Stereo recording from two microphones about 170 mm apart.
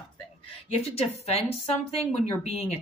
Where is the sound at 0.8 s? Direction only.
40° left (ahead or behind).